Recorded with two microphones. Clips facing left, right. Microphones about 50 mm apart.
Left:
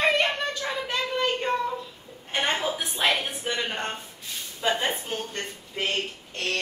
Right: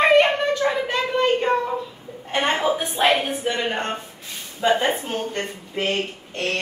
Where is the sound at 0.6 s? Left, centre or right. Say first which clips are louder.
Right 8 dB; right.